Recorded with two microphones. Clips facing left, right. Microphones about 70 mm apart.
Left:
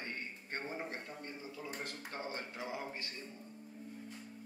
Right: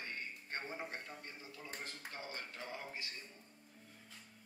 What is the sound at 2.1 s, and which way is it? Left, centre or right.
Speech, left.